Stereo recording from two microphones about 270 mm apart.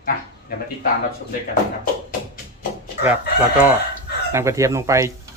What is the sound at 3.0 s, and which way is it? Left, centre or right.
Speech, centre.